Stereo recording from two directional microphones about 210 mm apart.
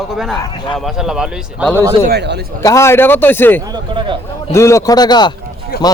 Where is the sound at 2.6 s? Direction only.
15° left (ahead or behind).